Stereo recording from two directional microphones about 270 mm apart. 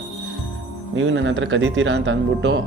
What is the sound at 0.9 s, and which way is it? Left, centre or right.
Speech, right.